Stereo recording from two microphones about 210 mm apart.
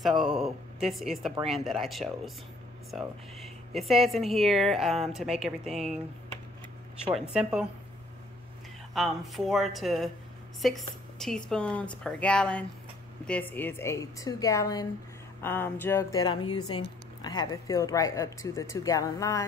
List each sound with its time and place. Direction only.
0.2 s speech: centre (ahead or behind)
7.2 s speech: 5° right (ahead or behind)
8.9 s speech: centre (ahead or behind); by 19.4 s 15° left (ahead or behind)